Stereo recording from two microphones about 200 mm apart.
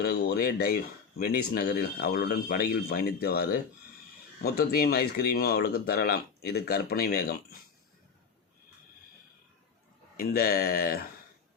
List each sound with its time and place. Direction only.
0.0 s speech: 50° left (ahead or behind)
10.2 s speech: 50° left (ahead or behind)